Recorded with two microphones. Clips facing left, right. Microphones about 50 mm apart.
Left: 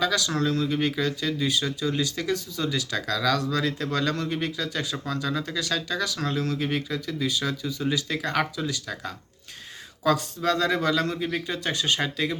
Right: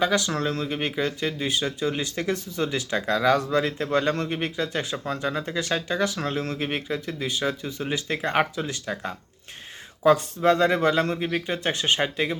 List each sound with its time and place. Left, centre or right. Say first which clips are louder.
0.0 s speech: right 1 dB; right